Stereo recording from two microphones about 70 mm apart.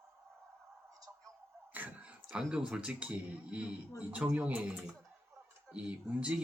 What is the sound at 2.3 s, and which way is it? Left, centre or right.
Speech, centre.